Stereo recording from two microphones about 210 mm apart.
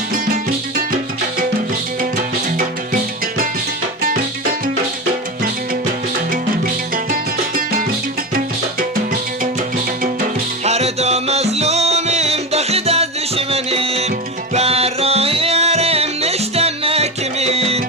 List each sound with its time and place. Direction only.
2.6 s music: 40° right (ahead or behind)
6.9 s music: 40° right (ahead or behind)
10.6 s music: 30° right (ahead or behind)